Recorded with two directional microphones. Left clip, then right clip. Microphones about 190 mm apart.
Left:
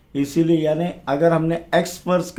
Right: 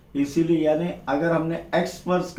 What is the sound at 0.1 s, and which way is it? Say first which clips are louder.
Speech: left 3 dB; 50° left (ahead or behind).